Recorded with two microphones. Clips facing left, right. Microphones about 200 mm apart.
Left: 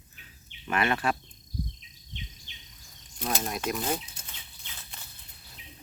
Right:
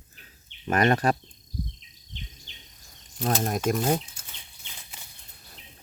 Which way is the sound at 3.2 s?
45° right (ahead or behind).